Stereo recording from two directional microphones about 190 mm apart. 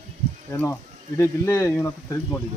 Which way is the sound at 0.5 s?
15° left (ahead or behind).